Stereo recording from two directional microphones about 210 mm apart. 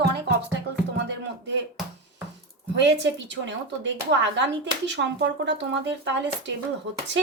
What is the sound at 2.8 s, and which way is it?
Speech, 60° right (ahead or behind).